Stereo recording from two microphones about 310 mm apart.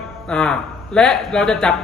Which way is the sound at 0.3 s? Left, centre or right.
Centre.